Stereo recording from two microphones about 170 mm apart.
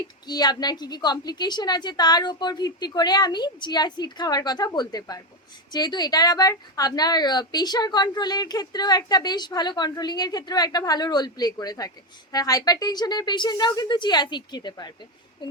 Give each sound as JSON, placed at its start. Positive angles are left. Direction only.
{"t": 0.0, "sound": "a woman's voice", "side_deg": 25}